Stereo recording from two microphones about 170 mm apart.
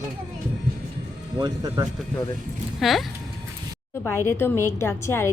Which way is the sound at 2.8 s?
Centre (ahead or behind).